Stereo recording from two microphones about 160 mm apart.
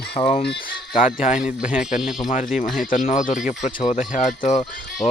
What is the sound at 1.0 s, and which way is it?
Speech, 50° left (ahead or behind).